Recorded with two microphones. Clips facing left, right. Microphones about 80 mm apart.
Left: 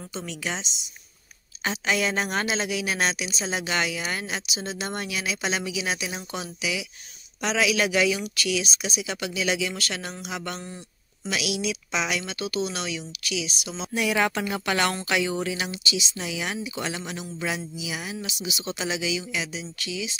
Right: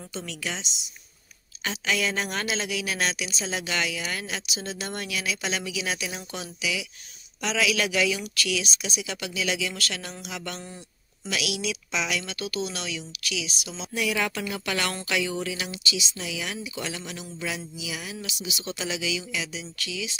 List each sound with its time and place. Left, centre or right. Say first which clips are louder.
0.1 s a woman's voice: left 2 dB; left